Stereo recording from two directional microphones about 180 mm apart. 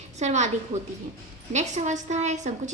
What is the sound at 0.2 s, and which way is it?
A woman's voice, 40° right (ahead or behind).